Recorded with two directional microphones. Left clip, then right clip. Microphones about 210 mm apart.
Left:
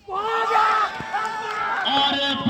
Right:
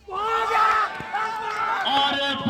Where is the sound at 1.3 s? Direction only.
50° right (ahead or behind).